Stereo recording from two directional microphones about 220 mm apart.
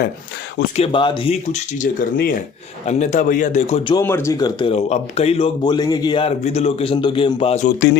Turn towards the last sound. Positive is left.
turn(degrees=30)  # may be behind; listen again after turning